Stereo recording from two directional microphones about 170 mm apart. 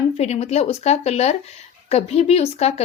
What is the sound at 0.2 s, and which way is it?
A woman's voice, 40° left (ahead or behind).